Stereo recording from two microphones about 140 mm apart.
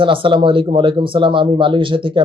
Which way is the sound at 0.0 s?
35° right (ahead or behind).